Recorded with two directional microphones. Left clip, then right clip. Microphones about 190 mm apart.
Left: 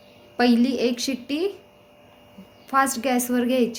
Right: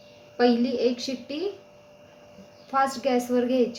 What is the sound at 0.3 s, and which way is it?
A woman's voice, 45° left (ahead or behind).